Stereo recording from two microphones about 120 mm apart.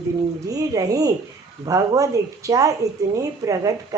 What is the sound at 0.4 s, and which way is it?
Speech, 30° right (ahead or behind).